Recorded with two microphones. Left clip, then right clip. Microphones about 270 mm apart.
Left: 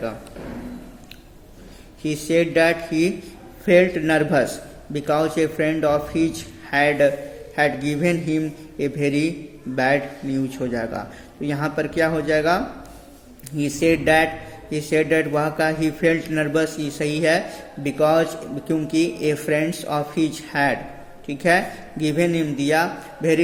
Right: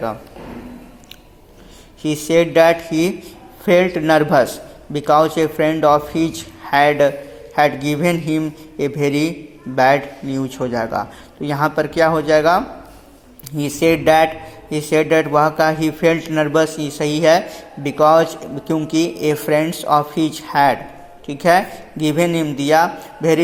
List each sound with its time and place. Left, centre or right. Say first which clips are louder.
2.0 s speech: right 5 dB; centre